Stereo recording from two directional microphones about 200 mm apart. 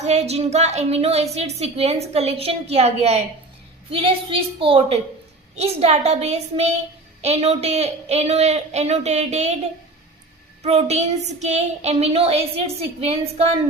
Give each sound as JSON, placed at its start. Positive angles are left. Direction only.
{"t": 0.0, "sound": "a woman's voice", "side_deg": -35}
{"t": 10.6, "sound": "a woman's voice", "side_deg": -30}